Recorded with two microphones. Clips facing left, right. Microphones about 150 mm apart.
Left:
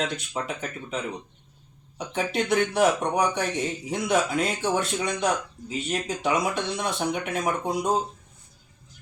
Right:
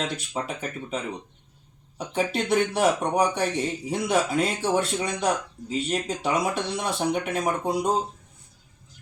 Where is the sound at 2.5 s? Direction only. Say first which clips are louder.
Left 1 dB; 30° right (ahead or behind).